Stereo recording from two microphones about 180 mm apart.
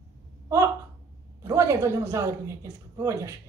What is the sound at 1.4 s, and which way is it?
A woman's voice, 15° right (ahead or behind).